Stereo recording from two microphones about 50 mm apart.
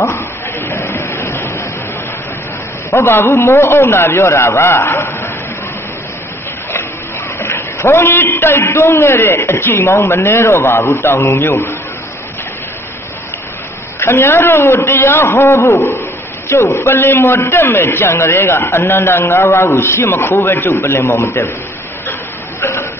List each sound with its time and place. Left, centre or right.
0.7 s a sound: left
2.9 s a man's voice: left
3.3 s a man's voice: left
3.5 s a man's voice: left
7.3 s a sound: left
7.8 s a man's voice: left
13.9 s a man's voice: left